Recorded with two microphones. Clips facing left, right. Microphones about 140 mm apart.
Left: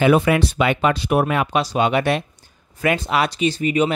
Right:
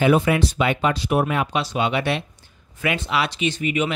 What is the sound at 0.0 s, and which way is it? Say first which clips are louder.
Speech: left 2 dB; 70° left (ahead or behind).